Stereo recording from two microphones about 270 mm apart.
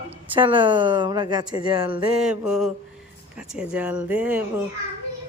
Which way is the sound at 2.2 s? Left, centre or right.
Centre.